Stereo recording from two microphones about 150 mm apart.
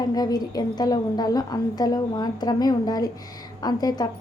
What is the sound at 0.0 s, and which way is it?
A woman's voice, 25° left (ahead or behind).